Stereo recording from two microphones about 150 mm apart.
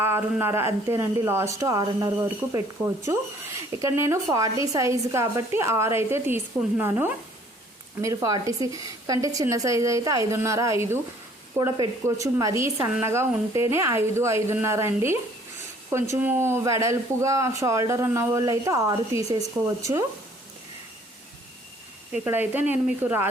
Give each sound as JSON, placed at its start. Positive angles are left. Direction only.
{"t": 0.0, "sound": "a woman's voice", "side_deg": -15}
{"t": 22.1, "sound": "speech", "side_deg": -15}